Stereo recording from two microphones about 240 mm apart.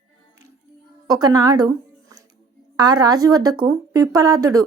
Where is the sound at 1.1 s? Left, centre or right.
Centre.